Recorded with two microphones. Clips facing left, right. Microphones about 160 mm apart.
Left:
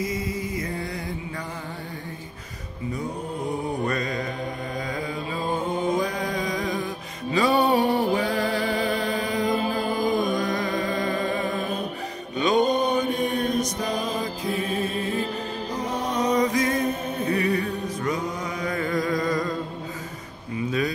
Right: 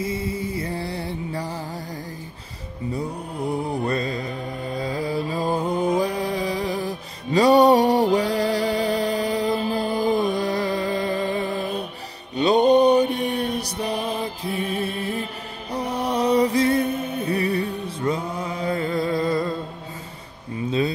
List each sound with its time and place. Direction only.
0.0 s music: 30° right (ahead or behind)
3.8 s mantra: 30° right (ahead or behind)
10.3 s music: 35° right (ahead or behind)
12.4 s mantra: 35° right (ahead or behind)
13.3 s music: 35° right (ahead or behind)
14.6 s music: 35° left (ahead or behind)
15.9 s music: 35° right (ahead or behind)